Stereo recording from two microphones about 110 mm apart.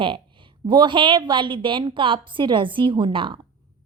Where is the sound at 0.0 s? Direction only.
50° right (ahead or behind).